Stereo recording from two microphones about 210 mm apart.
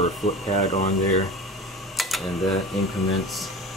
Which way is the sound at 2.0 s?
Centre (ahead or behind).